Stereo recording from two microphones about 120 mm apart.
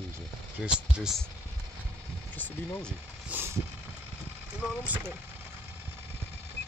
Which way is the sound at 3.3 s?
15° right (ahead or behind).